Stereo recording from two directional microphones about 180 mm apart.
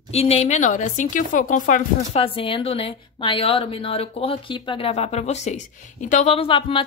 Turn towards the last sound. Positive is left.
turn(degrees=30)  # may be behind; listen again after turning